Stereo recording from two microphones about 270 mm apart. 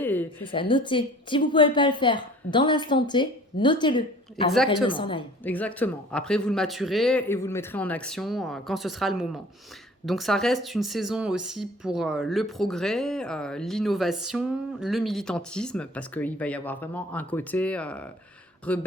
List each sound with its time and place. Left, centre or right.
0.0 s a sound: centre
0.4 s a woman's voice: centre
4.5 s speech: centre
4.9 s a woman's voice: centre
5.4 s speech: centre